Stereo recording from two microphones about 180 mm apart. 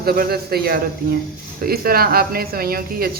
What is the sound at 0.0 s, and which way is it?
Speech, 60° right (ahead or behind).